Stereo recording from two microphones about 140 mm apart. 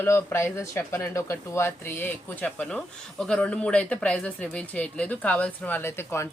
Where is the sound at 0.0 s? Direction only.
15° left (ahead or behind).